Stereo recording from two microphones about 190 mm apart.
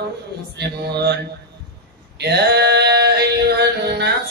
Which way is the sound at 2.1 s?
60° right (ahead or behind).